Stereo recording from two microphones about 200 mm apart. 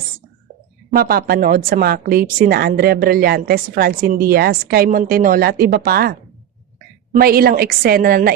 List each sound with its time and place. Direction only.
0.9 s a woman's voice: 50° right (ahead or behind)